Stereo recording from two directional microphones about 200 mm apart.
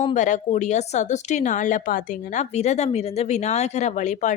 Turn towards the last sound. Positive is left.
turn(degrees=40)  # may be behind; listen again after turning